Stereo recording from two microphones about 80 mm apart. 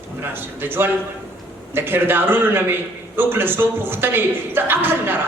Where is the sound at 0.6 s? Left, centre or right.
Right.